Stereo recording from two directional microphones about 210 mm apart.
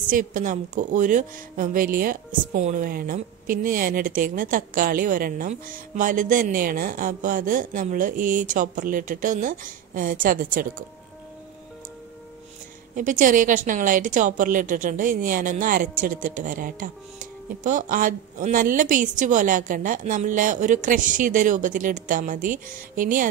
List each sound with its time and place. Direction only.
0.1 s a woman's voice: 40° right (ahead or behind)
12.9 s a woman's voice: 40° right (ahead or behind)